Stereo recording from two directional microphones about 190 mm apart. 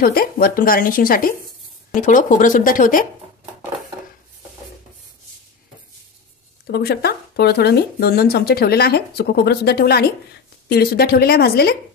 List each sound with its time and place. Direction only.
0.0 s speech: 50° left (ahead or behind)
6.7 s speech: 55° left (ahead or behind)